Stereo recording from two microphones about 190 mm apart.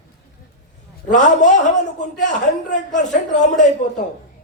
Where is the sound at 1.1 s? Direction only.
40° left (ahead or behind).